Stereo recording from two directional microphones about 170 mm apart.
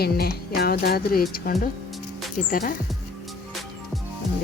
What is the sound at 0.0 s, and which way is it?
A woman's voice, 65° left (ahead or behind).